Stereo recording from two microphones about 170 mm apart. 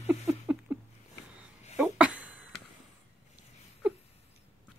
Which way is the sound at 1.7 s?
10° right (ahead or behind).